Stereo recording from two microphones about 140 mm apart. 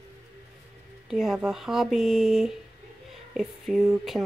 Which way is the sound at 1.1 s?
5° right (ahead or behind).